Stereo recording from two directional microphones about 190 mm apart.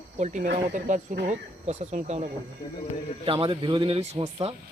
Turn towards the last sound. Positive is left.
turn(degrees=-30)  # may be behind; listen again after turning